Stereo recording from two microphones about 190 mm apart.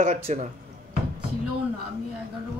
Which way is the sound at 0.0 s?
35° right (ahead or behind).